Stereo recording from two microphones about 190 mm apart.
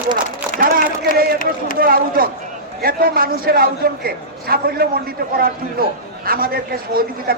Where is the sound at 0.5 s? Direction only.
50° right (ahead or behind).